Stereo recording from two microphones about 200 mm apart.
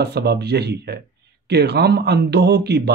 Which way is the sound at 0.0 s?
55° right (ahead or behind).